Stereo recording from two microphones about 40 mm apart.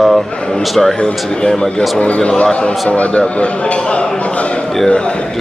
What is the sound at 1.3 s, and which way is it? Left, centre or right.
Speech, centre.